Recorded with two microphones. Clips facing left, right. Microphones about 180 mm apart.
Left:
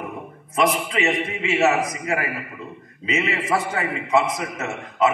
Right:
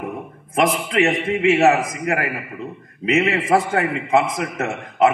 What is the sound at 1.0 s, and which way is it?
A man's voice, 60° right (ahead or behind).